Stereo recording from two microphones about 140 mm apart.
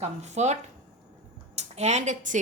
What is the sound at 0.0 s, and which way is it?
Speech, 55° right (ahead or behind).